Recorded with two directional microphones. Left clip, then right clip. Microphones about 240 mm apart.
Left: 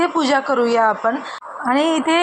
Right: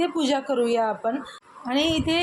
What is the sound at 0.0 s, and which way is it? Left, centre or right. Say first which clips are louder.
A woman's voice: left 7 dB; centre.